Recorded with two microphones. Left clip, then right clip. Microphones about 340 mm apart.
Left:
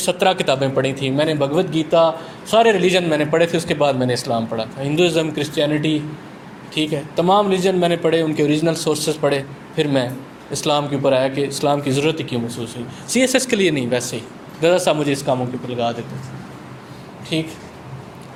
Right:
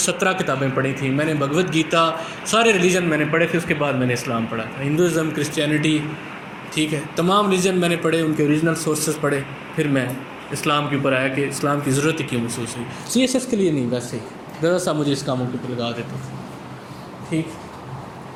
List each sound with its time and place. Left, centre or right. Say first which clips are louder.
0.0 s speech: left 3 dB; left